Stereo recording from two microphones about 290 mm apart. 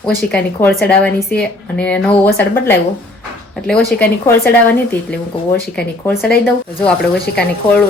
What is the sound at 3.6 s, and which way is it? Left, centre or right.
Speech, centre.